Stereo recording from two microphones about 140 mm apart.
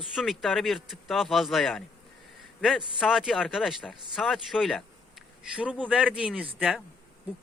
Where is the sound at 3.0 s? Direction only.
5° right (ahead or behind).